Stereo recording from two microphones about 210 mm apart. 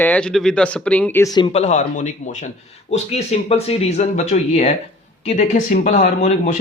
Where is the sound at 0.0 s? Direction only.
5° left (ahead or behind).